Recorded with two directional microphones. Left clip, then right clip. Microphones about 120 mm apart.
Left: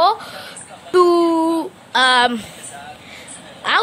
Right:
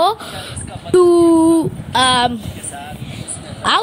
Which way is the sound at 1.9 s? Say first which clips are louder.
Even; centre (ahead or behind).